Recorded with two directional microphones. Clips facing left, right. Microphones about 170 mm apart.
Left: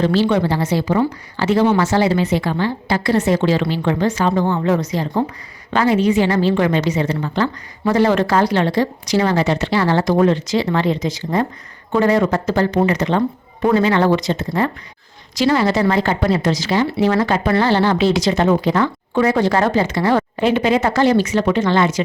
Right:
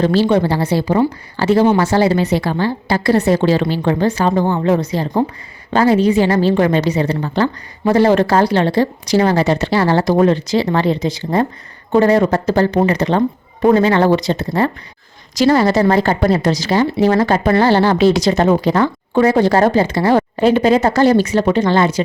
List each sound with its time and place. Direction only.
0.0 s a woman's voice: 40° right (ahead or behind)